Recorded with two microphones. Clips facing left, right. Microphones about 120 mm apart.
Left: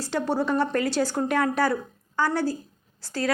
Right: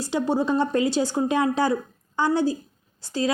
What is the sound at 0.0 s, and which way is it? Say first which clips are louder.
A woman's voice: right 2 dB; 15° right (ahead or behind).